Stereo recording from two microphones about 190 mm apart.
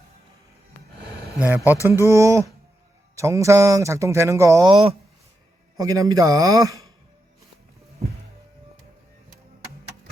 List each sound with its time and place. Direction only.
1.4 s speech: 10° right (ahead or behind)
4.7 s a man's voice: 30° right (ahead or behind)
5.7 s a man's voice: 20° right (ahead or behind)